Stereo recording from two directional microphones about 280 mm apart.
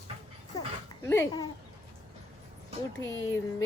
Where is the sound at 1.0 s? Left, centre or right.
Centre.